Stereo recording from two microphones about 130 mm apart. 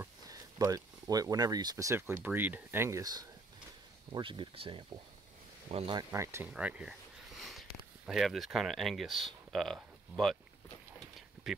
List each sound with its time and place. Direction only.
0.0 s speech: 25° right (ahead or behind)
4.1 s speech: 40° right (ahead or behind)
6.1 s speech: 20° right (ahead or behind)
6.5 s a sound: 5° right (ahead or behind)
8.1 s speech: centre (ahead or behind)
11.4 s speech: 5° right (ahead or behind)